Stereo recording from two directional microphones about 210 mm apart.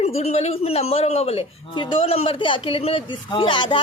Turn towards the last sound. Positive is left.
turn(degrees=20)  # may be behind; listen again after turning